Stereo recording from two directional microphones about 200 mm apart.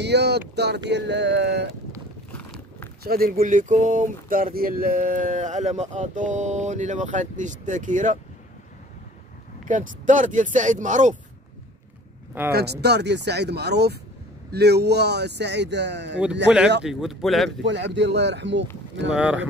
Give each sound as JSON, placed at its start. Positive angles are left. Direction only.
{"t": 0.0, "sound": "speech", "side_deg": -55}
{"t": 3.0, "sound": "speech", "side_deg": -50}
{"t": 9.7, "sound": "speech", "side_deg": -40}
{"t": 12.5, "sound": "speech", "side_deg": -55}
{"t": 16.8, "sound": "speech", "side_deg": 0}
{"t": 17.5, "sound": "speech", "side_deg": -60}
{"t": 19.1, "sound": "speech", "side_deg": -5}